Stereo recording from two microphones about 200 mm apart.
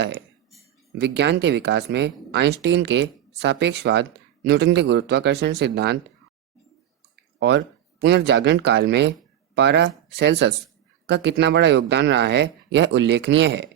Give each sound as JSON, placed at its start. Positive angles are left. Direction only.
{"t": 0.9, "sound": "speech", "side_deg": -60}
{"t": 7.3, "sound": "speech", "side_deg": -60}